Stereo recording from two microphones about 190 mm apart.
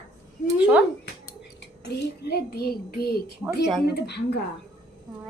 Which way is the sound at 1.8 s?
55° left (ahead or behind).